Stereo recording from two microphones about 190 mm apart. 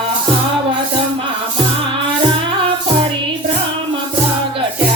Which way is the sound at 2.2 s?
25° right (ahead or behind).